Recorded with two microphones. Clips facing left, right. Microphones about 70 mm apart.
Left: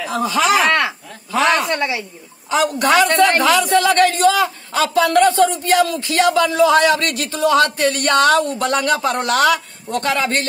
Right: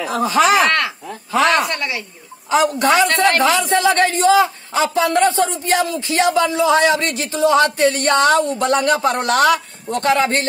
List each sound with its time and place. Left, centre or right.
0.0 s speech: right
0.7 s speech: centre
2.5 s a man's voice: right